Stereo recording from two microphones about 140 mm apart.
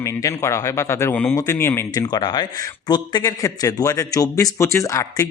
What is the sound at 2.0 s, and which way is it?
Speech, 30° left (ahead or behind).